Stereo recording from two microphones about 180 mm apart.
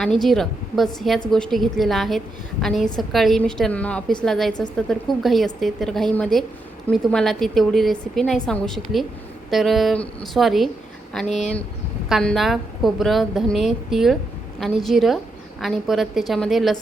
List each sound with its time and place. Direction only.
0.0 s a woman's voice: centre (ahead or behind)
11.3 s speech: 40° left (ahead or behind)
12.0 s a woman's voice: centre (ahead or behind)